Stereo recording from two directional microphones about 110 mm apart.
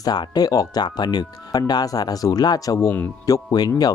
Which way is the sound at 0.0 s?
35° left (ahead or behind).